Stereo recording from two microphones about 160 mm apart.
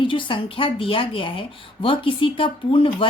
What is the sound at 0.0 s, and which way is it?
A woman's voice, 30° left (ahead or behind).